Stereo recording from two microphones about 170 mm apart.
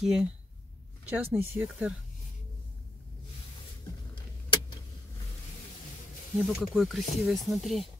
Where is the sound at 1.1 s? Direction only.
15° right (ahead or behind).